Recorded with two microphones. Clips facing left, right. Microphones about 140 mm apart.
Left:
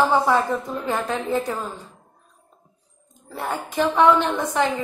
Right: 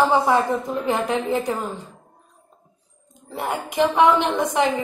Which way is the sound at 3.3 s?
15° right (ahead or behind).